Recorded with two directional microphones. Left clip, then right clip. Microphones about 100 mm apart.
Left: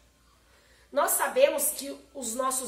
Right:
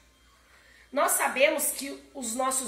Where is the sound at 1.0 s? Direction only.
35° left (ahead or behind).